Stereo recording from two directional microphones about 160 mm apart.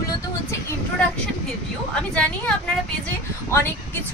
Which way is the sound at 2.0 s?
5° left (ahead or behind).